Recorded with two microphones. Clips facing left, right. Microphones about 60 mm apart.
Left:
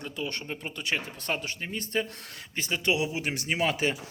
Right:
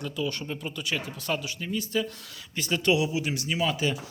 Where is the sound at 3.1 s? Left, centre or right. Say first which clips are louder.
Right 1 dB; left.